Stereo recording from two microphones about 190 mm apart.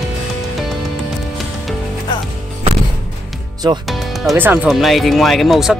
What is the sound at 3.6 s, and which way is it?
Speech, 20° right (ahead or behind).